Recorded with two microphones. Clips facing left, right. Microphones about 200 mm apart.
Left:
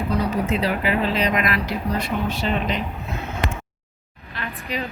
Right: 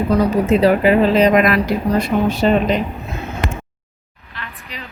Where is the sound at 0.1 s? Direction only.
45° right (ahead or behind).